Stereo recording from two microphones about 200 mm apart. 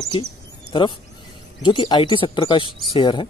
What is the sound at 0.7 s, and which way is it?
Speech, 25° left (ahead or behind).